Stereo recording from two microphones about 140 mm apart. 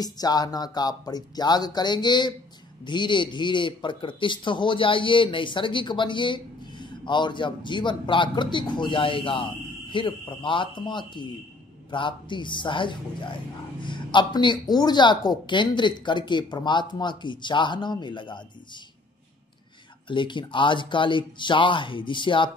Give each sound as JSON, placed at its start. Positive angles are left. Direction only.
{"t": 0.0, "sound": "speech", "side_deg": 30}
{"t": 20.1, "sound": "speech", "side_deg": 35}